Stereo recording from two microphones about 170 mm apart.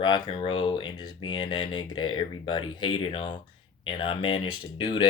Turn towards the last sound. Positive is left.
turn(degrees=25)  # may be behind; listen again after turning